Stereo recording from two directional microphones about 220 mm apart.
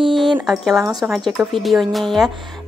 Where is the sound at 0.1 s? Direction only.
Centre (ahead or behind).